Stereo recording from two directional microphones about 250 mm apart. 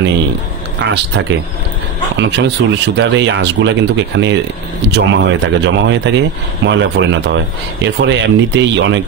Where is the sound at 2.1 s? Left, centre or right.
Right.